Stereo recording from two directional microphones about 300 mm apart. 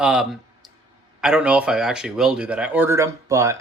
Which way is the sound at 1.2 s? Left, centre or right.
Centre.